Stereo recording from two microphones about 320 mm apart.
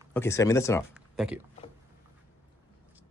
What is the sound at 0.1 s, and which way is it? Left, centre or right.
Speech, centre.